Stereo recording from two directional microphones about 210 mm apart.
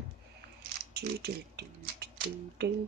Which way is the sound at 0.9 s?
50° right (ahead or behind).